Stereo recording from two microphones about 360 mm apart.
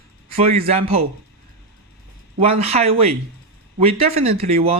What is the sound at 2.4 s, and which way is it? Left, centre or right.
A man's voice, centre.